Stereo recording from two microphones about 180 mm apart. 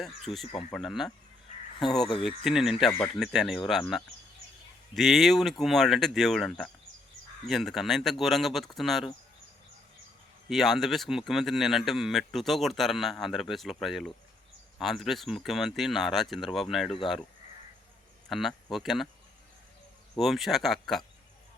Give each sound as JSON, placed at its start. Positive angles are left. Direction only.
{"t": 0.0, "sound": "speech", "side_deg": 0}
{"t": 10.5, "sound": "speech", "side_deg": 0}
{"t": 18.3, "sound": "speech", "side_deg": 0}
{"t": 20.1, "sound": "speech", "side_deg": 0}